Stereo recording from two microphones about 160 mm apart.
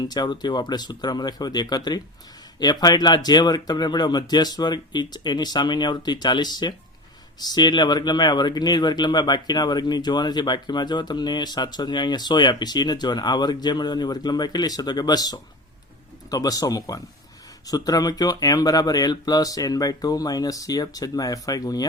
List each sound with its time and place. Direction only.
0.0 s speech: 25° left (ahead or behind)